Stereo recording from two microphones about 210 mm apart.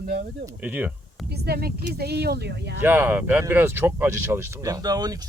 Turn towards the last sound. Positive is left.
turn(degrees=-20)  # may be behind; listen again after turning